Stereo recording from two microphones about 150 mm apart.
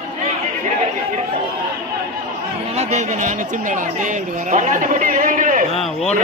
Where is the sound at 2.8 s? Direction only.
50° right (ahead or behind).